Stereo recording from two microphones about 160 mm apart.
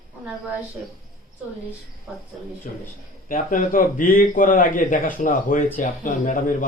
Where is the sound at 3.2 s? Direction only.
55° left (ahead or behind).